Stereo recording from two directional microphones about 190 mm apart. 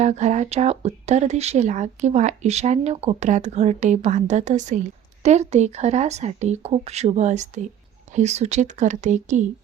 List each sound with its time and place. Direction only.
0.0 s speech: 40° right (ahead or behind)